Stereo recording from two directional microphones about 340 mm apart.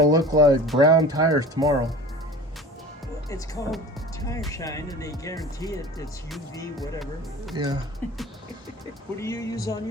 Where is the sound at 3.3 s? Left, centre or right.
Centre.